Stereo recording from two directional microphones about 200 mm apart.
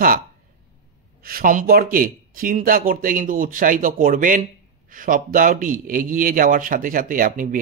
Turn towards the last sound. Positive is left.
turn(degrees=-40)  # may be behind; listen again after turning